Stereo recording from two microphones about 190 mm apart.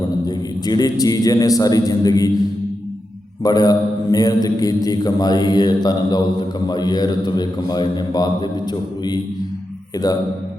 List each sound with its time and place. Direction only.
0.3 s a man's voice: 20° left (ahead or behind)
3.4 s a man's voice: 20° left (ahead or behind)